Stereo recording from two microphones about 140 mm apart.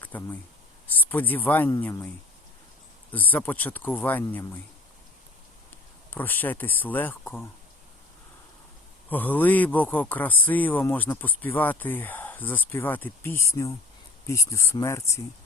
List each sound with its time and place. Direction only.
0.0 s a sound: 10° left (ahead or behind)
0.9 s a man's voice: 10° left (ahead or behind)
3.1 s a man's voice: 10° left (ahead or behind)
6.1 s a man's voice: 15° left (ahead or behind)
9.0 s a man's voice: 10° left (ahead or behind)